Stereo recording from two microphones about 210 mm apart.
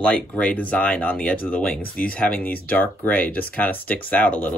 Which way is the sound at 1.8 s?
45° left (ahead or behind).